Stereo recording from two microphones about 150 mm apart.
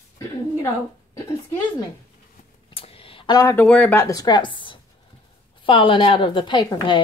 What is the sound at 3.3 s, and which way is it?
Speech, 20° left (ahead or behind).